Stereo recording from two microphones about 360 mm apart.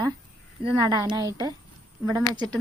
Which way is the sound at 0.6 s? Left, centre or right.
Centre.